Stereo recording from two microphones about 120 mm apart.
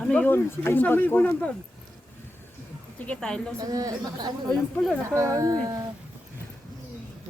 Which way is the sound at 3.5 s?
30° right (ahead or behind).